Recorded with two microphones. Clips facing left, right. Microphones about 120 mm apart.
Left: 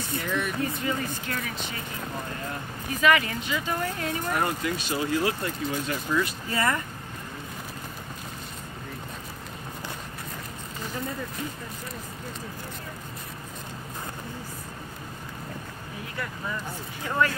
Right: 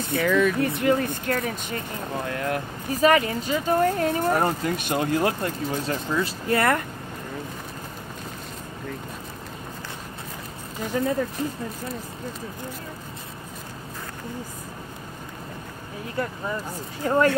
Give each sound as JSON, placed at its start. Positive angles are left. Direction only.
{"t": 0.1, "sound": "speech", "side_deg": -70}
{"t": 2.2, "sound": "speech", "side_deg": -75}
{"t": 2.9, "sound": "speech", "side_deg": -35}
{"t": 4.6, "sound": "speech", "side_deg": -55}
{"t": 6.0, "sound": "speech", "side_deg": -20}
{"t": 6.5, "sound": "speech", "side_deg": -60}
{"t": 10.9, "sound": "speech", "side_deg": -80}
{"t": 17.0, "sound": "speech", "side_deg": -40}